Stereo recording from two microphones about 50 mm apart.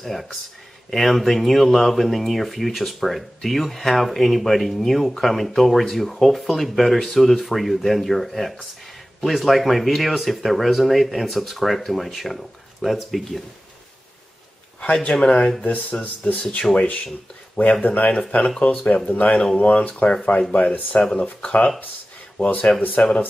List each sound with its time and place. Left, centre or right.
0.0 s speech: centre
15.0 s speech: left
15.6 s speech: left